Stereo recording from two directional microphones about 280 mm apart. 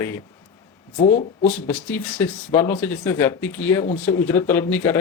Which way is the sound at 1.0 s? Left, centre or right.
Left.